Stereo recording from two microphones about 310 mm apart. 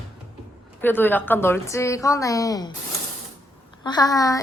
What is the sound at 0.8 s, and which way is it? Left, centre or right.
A woman's voice, centre.